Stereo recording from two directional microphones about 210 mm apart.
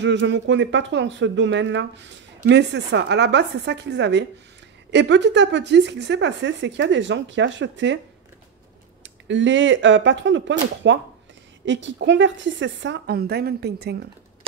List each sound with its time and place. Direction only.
0.0 s speech: 55° right (ahead or behind)
9.0 s speech: 60° right (ahead or behind)